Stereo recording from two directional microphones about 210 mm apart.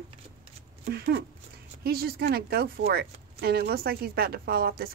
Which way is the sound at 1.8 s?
45° right (ahead or behind).